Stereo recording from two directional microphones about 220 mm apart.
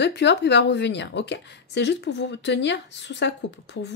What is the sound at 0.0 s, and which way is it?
A woman's voice, 50° left (ahead or behind).